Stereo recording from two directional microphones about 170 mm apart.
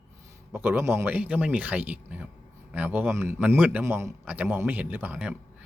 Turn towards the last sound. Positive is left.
turn(degrees=-5)  # may be behind; listen again after turning